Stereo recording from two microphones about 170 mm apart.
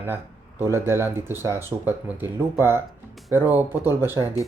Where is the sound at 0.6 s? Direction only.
15° right (ahead or behind).